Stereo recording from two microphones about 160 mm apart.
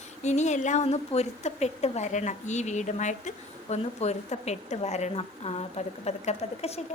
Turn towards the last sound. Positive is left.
turn(degrees=40)  # may be behind; listen again after turning